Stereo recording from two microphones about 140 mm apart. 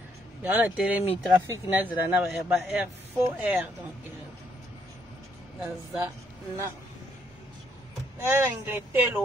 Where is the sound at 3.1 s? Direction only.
15° right (ahead or behind).